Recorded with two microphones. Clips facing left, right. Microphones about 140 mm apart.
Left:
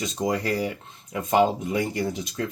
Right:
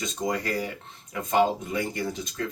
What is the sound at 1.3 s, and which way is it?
Speech, 25° left (ahead or behind).